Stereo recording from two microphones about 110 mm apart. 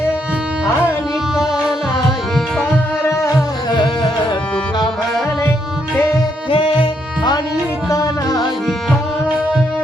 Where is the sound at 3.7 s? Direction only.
45° left (ahead or behind).